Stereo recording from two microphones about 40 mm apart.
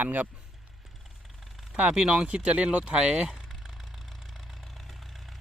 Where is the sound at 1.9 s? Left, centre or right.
Right.